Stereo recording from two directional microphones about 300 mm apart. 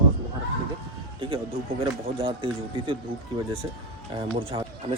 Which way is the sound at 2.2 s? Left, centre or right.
Centre.